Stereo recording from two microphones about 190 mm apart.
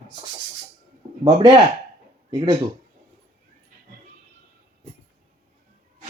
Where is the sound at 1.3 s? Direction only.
20° right (ahead or behind).